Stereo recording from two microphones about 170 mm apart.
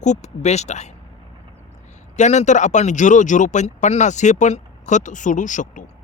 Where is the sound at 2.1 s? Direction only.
45° left (ahead or behind).